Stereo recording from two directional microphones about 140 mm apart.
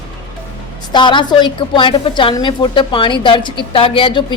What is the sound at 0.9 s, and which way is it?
A woman's voice, 35° left (ahead or behind).